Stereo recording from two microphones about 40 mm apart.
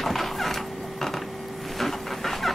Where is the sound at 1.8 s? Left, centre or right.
Centre.